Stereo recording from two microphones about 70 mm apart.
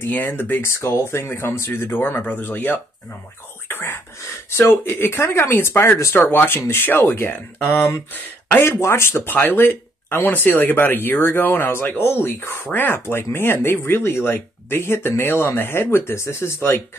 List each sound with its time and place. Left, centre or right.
0.0 s speech: left
0.7 s speech: left
3.6 s whispering: left
4.2 s speech: left